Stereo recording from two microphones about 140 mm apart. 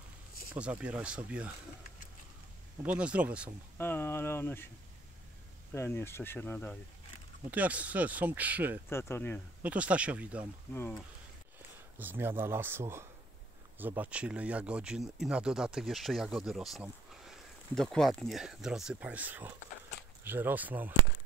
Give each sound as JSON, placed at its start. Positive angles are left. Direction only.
{"t": 0.6, "sound": "speech", "side_deg": -10}
{"t": 2.8, "sound": "speech", "side_deg": -10}
{"t": 3.7, "sound": "speech", "side_deg": 15}
{"t": 5.7, "sound": "speech", "side_deg": 15}
{"t": 7.5, "sound": "speech", "side_deg": -10}
{"t": 8.8, "sound": "speech", "side_deg": 20}
{"t": 9.6, "sound": "speech", "side_deg": -10}
{"t": 10.7, "sound": "speech", "side_deg": 15}
{"t": 12.0, "sound": "speech", "side_deg": -15}